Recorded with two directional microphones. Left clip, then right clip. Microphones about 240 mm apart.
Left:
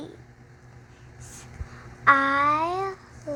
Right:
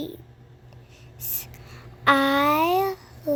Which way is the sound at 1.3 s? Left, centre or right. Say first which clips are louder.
Right 4 dB; right.